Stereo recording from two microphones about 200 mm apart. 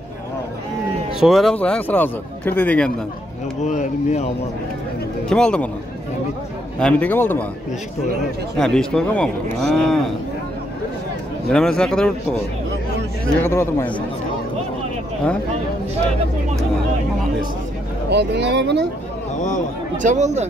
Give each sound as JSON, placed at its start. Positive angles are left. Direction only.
{"t": 1.2, "sound": "a man's voice", "side_deg": 0}
{"t": 3.6, "sound": "speech", "side_deg": 35}
{"t": 5.3, "sound": "speech", "side_deg": 5}
{"t": 6.8, "sound": "a man's voice", "side_deg": 5}
{"t": 8.5, "sound": "speech", "side_deg": 5}
{"t": 11.5, "sound": "speech", "side_deg": 5}
{"t": 13.4, "sound": "a man's voice", "side_deg": 15}
{"t": 18.1, "sound": "speech", "side_deg": -60}
{"t": 20.0, "sound": "speech", "side_deg": -35}